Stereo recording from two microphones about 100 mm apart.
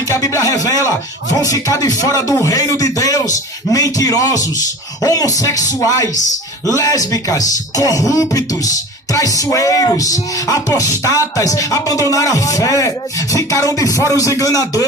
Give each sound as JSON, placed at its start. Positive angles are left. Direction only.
{"t": 0.1, "sound": "speech", "side_deg": 35}